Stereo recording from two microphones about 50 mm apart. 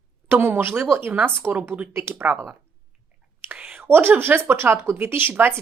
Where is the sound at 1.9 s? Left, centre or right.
Right.